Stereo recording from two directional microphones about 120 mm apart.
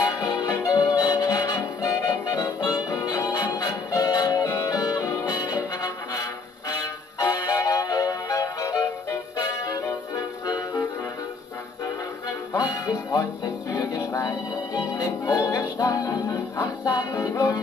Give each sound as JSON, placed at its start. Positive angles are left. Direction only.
{"t": 0.3, "sound": "music", "side_deg": 30}
{"t": 7.2, "sound": "music", "side_deg": 30}
{"t": 12.5, "sound": "music", "side_deg": 30}